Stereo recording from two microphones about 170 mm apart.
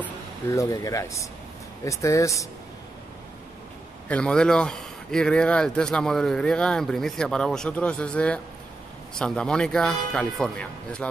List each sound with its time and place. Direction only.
0.5 s speech: 20° left (ahead or behind)
4.1 s speech: 5° left (ahead or behind)